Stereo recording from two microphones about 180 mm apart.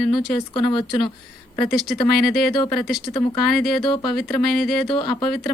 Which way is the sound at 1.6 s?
Centre (ahead or behind).